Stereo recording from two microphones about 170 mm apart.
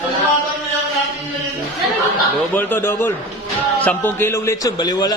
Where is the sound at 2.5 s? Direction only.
10° left (ahead or behind).